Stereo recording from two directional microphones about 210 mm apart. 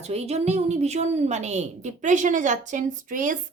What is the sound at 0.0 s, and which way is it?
Speech, 30° right (ahead or behind).